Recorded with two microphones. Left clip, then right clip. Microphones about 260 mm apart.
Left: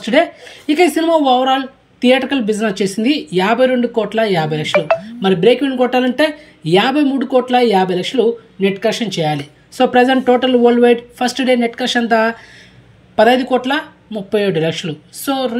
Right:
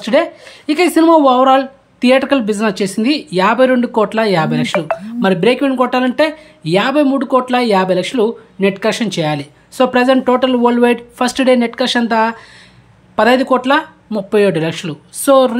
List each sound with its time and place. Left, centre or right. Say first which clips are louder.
0.0 s a woman's voice: even; centre